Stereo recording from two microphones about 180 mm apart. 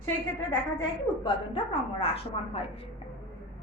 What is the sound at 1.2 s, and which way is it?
A woman's voice, 30° left (ahead or behind).